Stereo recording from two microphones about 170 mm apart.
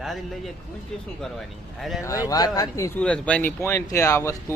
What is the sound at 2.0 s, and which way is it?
A man's voice, 20° left (ahead or behind).